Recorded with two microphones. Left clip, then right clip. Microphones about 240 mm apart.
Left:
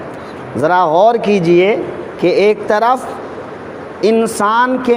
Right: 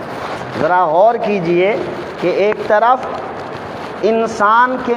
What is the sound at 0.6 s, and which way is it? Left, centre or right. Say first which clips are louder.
Speech: left 1 dB; left.